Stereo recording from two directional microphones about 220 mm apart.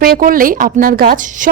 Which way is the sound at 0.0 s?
40° right (ahead or behind).